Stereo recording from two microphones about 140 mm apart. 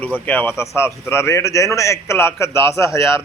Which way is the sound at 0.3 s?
15° left (ahead or behind).